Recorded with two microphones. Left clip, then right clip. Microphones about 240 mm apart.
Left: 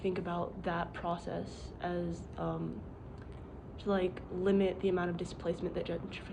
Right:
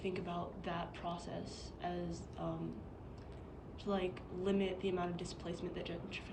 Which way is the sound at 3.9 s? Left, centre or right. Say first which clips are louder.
Left 5 dB; centre.